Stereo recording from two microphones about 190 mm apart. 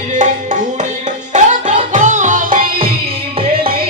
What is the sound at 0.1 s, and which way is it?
Music, 40° right (ahead or behind).